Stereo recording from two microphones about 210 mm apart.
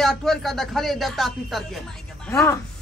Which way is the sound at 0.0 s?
Centre (ahead or behind).